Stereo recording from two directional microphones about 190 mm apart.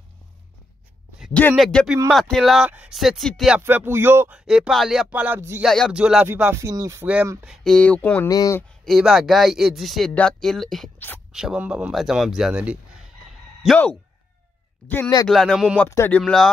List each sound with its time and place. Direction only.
1.2 s a sound: 5° left (ahead or behind)
1.5 s speech: centre (ahead or behind)
5.7 s speech: centre (ahead or behind); by 8.6 s 15° left (ahead or behind)
8.6 s speech: centre (ahead or behind)
14.9 s speech: 15° left (ahead or behind)
15.2 s speech: centre (ahead or behind)
15.8 s speech: 10° left (ahead or behind)